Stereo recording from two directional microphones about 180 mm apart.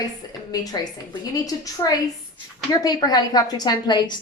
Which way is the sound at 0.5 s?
20° left (ahead or behind).